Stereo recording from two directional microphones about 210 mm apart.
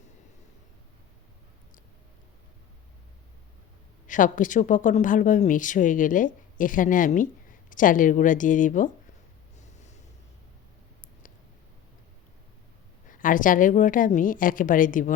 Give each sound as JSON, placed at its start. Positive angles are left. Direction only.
{"t": 4.0, "sound": "speech", "side_deg": 40}
{"t": 9.6, "sound": "a sound", "side_deg": 35}
{"t": 13.1, "sound": "speech", "side_deg": 40}